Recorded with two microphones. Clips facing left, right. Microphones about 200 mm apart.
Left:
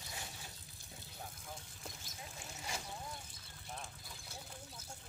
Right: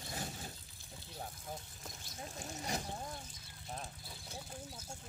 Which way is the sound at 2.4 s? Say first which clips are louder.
Right 6 dB; 40° right (ahead or behind).